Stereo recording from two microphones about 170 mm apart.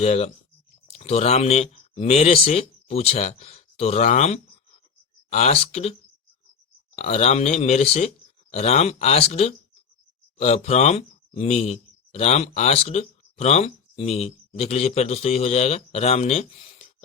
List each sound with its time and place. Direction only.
0.0 s speech: 40° left (ahead or behind)
6.9 s speech: 40° left (ahead or behind)